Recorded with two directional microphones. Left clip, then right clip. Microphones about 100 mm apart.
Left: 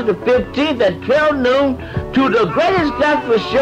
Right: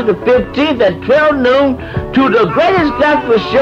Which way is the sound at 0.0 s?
30° left (ahead or behind).